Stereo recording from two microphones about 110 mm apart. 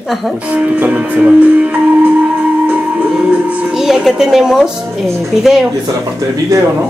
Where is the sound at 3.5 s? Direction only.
5° right (ahead or behind).